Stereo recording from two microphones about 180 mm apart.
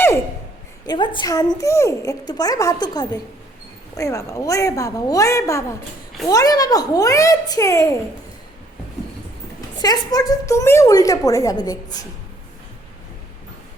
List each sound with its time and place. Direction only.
0.9 s a woman's voice: 25° left (ahead or behind)
9.7 s a woman's voice: 25° left (ahead or behind)